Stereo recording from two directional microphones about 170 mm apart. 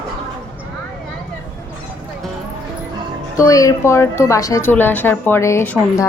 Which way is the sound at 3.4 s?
20° left (ahead or behind).